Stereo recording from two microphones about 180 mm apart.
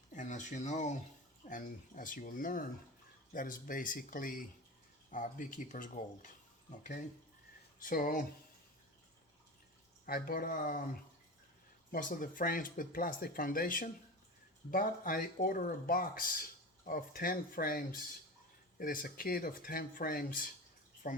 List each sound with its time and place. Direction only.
0.1 s speech: 45° left (ahead or behind)
10.1 s speech: 55° left (ahead or behind)
11.9 s speech: 50° left (ahead or behind)